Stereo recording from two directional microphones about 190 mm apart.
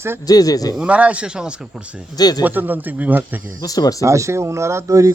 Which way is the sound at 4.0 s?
15° right (ahead or behind).